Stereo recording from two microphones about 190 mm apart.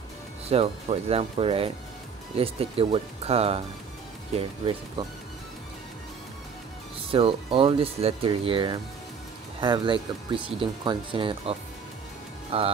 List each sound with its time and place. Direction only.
0.5 s speech: 35° right (ahead or behind)
7.1 s speech: 30° right (ahead or behind)